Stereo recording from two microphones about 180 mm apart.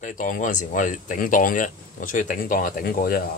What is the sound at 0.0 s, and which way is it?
Speech, 45° left (ahead or behind).